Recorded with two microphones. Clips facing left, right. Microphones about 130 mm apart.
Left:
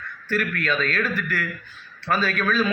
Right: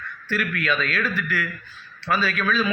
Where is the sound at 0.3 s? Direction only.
45° left (ahead or behind).